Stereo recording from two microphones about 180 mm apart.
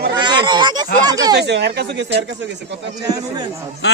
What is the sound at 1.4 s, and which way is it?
Speech, 70° right (ahead or behind).